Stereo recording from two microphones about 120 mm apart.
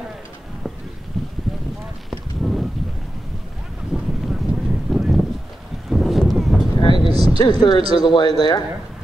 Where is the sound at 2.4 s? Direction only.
Centre (ahead or behind).